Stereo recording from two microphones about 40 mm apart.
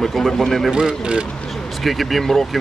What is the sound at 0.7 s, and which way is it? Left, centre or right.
Speech, right.